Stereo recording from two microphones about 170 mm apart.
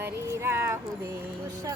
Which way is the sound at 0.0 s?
15° right (ahead or behind).